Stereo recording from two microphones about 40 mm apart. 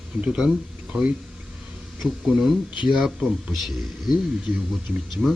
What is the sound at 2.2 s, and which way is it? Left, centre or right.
Speech, centre.